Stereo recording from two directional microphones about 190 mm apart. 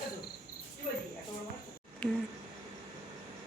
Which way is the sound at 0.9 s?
35° left (ahead or behind).